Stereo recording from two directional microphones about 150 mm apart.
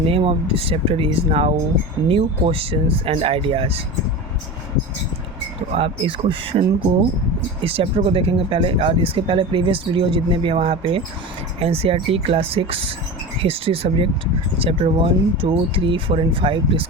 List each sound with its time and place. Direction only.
0.0 s speech: 40° right (ahead or behind)
5.7 s speech: 40° right (ahead or behind)